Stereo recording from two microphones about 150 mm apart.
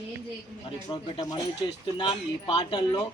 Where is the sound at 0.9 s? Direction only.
35° left (ahead or behind).